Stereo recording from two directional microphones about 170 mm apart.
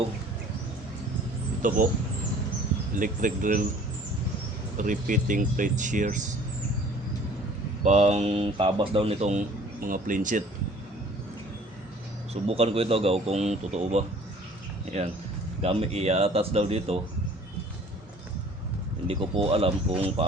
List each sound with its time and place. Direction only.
1.6 s speech: 50° right (ahead or behind)
2.9 s speech: 50° right (ahead or behind)
4.8 s speech: 50° right (ahead or behind)
7.9 s speech: 40° right (ahead or behind)
9.8 s speech: 55° right (ahead or behind)
12.3 s speech: 35° right (ahead or behind)
19.0 s speech: 35° right (ahead or behind)